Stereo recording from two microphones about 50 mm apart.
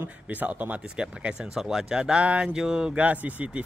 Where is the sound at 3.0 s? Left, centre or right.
Right.